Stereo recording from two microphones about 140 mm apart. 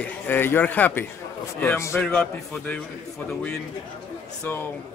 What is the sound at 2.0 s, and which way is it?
Speech, 10° left (ahead or behind).